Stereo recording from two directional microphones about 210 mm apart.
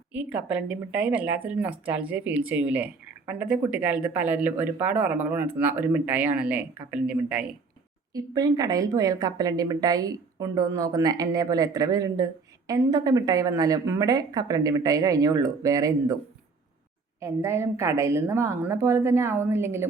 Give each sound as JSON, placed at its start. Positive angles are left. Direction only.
{"t": 0.1, "sound": "a woman's voice", "side_deg": -5}
{"t": 8.1, "sound": "a woman's voice", "side_deg": -15}
{"t": 17.2, "sound": "a woman's voice", "side_deg": -15}